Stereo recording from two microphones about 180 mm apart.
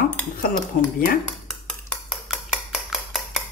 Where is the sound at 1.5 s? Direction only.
Centre (ahead or behind).